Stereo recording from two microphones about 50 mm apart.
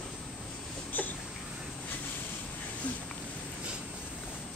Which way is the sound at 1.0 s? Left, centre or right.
Left.